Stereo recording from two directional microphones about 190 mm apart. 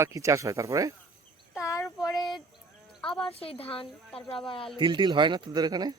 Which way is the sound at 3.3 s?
30° left (ahead or behind).